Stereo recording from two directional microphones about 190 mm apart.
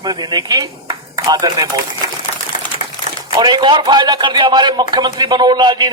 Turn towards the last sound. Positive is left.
turn(degrees=-25)  # may be behind; listen again after turning